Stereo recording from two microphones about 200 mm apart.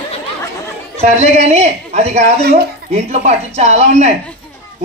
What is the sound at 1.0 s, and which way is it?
A woman's voice, 30° right (ahead or behind).